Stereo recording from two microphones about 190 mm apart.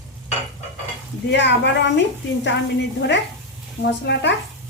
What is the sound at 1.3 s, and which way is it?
A woman's voice, 65° left (ahead or behind).